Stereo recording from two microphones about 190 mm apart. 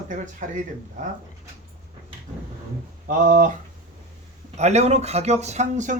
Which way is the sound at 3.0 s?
45° right (ahead or behind).